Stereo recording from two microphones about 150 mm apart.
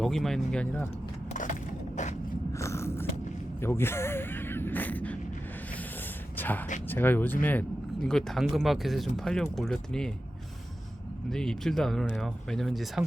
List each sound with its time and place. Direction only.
0.0 s speech: centre (ahead or behind)
2.5 s biting: 20° left (ahead or behind)
3.6 s speech: 15° left (ahead or behind)
6.3 s a sound: 10° left (ahead or behind)
6.8 s speech: 15° left (ahead or behind)
11.3 s speech: 5° left (ahead or behind)